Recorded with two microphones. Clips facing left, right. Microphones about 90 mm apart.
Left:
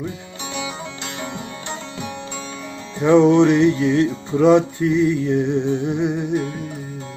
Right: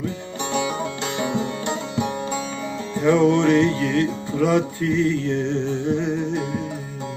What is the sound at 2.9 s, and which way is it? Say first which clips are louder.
Music: left 4 dB; 20° left (ahead or behind).